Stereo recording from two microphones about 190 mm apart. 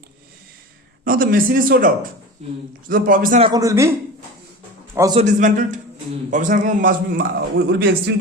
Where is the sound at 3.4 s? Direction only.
20° right (ahead or behind).